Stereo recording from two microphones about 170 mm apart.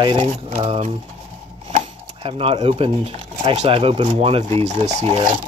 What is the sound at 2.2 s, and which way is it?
Speech, 35° right (ahead or behind).